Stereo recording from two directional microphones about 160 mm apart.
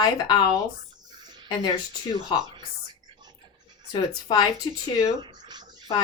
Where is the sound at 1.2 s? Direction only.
25° right (ahead or behind).